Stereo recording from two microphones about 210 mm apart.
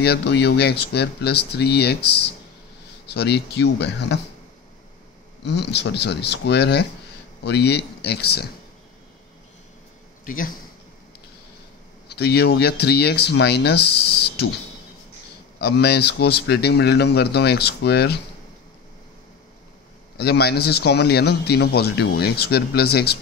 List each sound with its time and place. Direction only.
0.0 s a man's voice: 50° left (ahead or behind)
5.4 s a man's voice: 55° left (ahead or behind)
10.2 s a man's voice: 40° left (ahead or behind)
12.1 s a man's voice: 50° left (ahead or behind)
15.6 s a man's voice: 50° left (ahead or behind)
20.2 s a man's voice: 50° left (ahead or behind)